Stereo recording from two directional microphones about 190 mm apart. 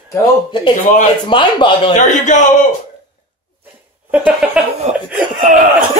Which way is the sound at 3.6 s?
10° right (ahead or behind).